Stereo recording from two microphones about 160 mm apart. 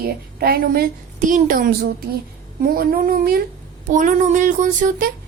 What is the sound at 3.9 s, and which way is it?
A woman's voice, 50° right (ahead or behind).